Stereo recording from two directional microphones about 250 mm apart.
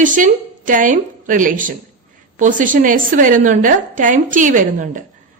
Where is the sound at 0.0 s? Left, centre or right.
Right.